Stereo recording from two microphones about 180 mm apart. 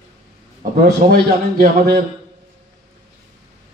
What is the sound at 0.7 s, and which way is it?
A man's voice, 55° right (ahead or behind).